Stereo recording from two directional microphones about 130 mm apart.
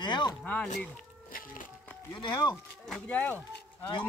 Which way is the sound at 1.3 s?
90° left.